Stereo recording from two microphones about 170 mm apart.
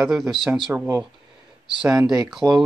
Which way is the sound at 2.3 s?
Centre (ahead or behind).